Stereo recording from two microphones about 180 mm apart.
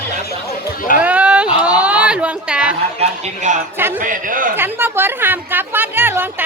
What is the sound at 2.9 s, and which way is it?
A man's voice, 35° right (ahead or behind).